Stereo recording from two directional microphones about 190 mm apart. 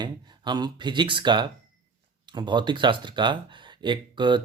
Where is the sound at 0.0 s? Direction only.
20° right (ahead or behind).